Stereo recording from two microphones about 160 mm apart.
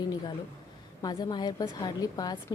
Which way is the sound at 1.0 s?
25° left (ahead or behind).